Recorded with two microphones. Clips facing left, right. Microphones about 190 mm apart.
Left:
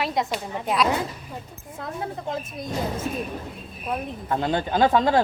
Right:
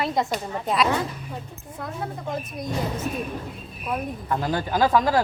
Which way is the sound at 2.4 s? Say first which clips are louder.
Right 1 dB; 25° left (ahead or behind).